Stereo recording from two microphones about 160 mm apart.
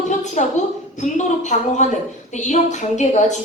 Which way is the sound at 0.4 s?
50° left (ahead or behind).